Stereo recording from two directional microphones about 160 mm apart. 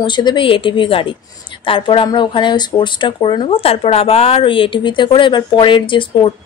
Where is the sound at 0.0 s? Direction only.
30° left (ahead or behind).